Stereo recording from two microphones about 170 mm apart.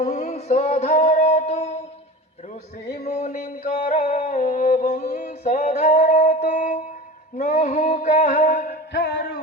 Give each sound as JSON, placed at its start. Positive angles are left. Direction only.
{"t": 0.0, "sound": "music", "side_deg": 40}
{"t": 2.8, "sound": "music", "side_deg": 70}
{"t": 3.1, "sound": "a sound", "side_deg": 45}
{"t": 3.4, "sound": "music", "side_deg": 60}
{"t": 7.3, "sound": "a sound", "side_deg": 45}
{"t": 8.9, "sound": "music", "side_deg": 90}